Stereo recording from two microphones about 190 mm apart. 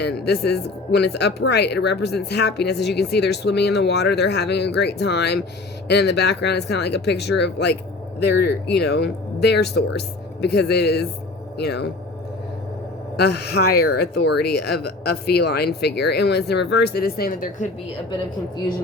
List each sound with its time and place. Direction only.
0.0 s speech: 60° left (ahead or behind)
13.1 s speech: 60° left (ahead or behind)